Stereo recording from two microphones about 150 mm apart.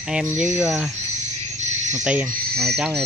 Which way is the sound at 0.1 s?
10° right (ahead or behind).